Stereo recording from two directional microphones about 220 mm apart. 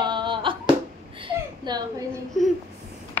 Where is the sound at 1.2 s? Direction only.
20° right (ahead or behind).